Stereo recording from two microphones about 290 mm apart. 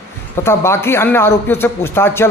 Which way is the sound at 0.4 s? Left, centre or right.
Centre.